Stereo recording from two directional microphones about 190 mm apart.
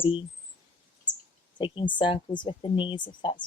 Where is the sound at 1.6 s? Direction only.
25° left (ahead or behind).